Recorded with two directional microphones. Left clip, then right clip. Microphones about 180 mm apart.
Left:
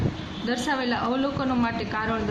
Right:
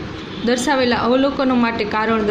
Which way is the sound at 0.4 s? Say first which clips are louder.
Right 10 dB; 30° right (ahead or behind).